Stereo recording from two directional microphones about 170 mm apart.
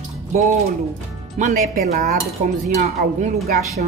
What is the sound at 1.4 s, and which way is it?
Speech, 45° right (ahead or behind).